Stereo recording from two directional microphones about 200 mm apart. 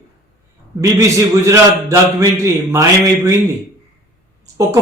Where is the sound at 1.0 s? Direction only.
15° right (ahead or behind).